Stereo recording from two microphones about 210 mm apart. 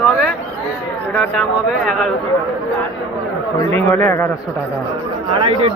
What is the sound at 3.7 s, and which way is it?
Speech, 5° left (ahead or behind).